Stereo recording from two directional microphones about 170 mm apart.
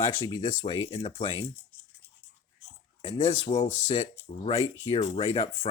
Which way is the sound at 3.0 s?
30° left (ahead or behind).